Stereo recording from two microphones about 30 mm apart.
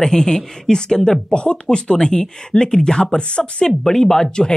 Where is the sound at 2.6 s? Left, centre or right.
Left.